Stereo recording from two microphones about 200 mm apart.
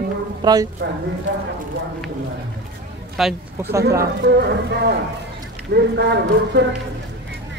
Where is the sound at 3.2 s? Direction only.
Centre (ahead or behind).